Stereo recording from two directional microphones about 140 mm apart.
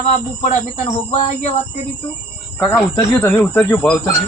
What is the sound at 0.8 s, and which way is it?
Speech, 50° left (ahead or behind).